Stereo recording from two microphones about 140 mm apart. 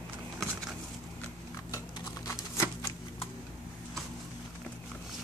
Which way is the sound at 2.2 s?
20° left (ahead or behind).